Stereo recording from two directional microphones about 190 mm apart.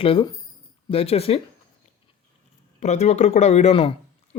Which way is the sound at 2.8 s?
35° left (ahead or behind).